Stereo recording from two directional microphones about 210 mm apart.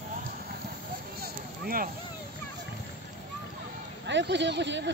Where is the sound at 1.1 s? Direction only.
45° right (ahead or behind).